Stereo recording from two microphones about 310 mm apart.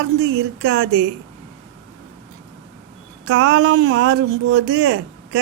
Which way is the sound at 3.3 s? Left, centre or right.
Right.